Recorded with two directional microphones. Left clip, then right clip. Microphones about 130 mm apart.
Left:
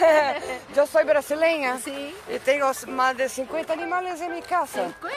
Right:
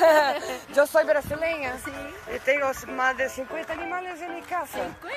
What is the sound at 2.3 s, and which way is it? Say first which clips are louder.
Speech: left 2 dB; 35° left (ahead or behind).